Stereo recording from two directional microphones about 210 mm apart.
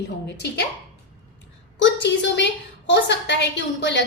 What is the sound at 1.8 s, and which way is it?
A woman's voice, 55° left (ahead or behind).